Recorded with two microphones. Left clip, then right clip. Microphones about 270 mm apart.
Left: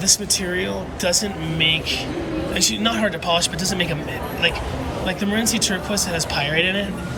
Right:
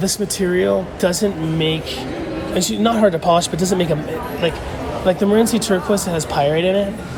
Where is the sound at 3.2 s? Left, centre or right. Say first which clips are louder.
Right 5 dB; right.